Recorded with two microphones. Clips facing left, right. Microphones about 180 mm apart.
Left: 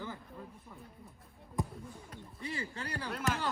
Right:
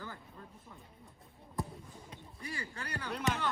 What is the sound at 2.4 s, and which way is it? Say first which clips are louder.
Speech: left 3 dB; 25° left (ahead or behind).